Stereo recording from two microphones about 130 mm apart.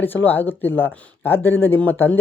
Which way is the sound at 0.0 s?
15° left (ahead or behind).